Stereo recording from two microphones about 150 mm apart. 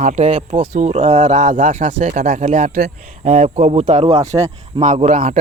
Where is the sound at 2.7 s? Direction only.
75° right (ahead or behind); by 4.2 s 50° right (ahead or behind).